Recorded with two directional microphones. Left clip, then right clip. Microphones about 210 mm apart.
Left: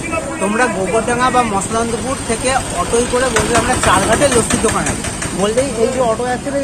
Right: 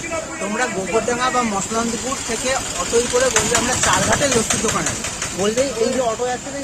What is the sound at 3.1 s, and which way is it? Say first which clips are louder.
Speech: left 3 dB; 50° right (ahead or behind).